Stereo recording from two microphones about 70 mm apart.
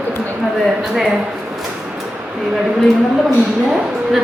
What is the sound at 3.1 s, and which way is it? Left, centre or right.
A woman's voice, centre.